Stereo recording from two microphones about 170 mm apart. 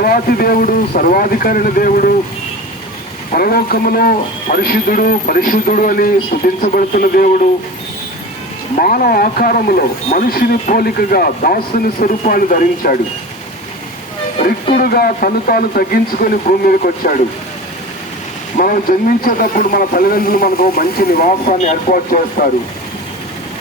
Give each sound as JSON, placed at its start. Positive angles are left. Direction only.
{"t": 0.0, "sound": "speech", "side_deg": 60}
{"t": 3.3, "sound": "speech", "side_deg": 60}
{"t": 8.7, "sound": "speech", "side_deg": 55}
{"t": 12.2, "sound": "speech", "side_deg": 50}
{"t": 14.8, "sound": "speech", "side_deg": 65}
{"t": 18.5, "sound": "speech", "side_deg": 55}